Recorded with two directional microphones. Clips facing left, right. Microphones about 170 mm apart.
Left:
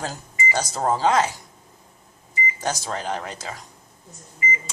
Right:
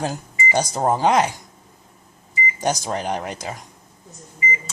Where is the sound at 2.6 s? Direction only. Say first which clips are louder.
Right 5 dB; 15° right (ahead or behind).